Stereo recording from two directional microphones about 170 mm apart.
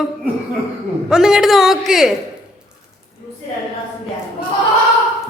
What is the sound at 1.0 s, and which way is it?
A woman's voice, 5° right (ahead or behind).